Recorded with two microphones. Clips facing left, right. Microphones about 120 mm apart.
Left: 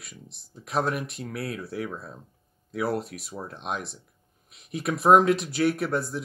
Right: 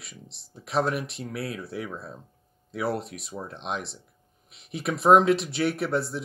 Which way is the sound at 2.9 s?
25° right (ahead or behind).